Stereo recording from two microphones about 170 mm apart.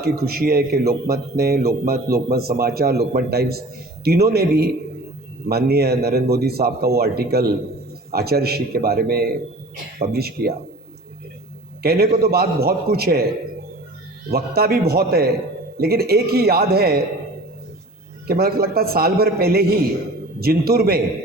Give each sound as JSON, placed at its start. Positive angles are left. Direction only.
{"t": 0.0, "sound": "a man's voice", "side_deg": -65}
{"t": 11.8, "sound": "a man's voice", "side_deg": -65}
{"t": 14.3, "sound": "a man's voice", "side_deg": -65}
{"t": 18.3, "sound": "a man's voice", "side_deg": -65}